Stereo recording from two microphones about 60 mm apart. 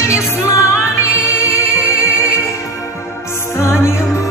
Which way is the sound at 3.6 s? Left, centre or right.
Left.